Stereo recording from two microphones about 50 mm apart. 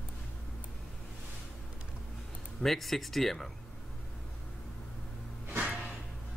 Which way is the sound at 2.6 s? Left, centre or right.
Centre.